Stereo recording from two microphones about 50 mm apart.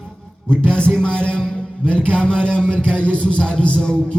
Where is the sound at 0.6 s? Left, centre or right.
Centre.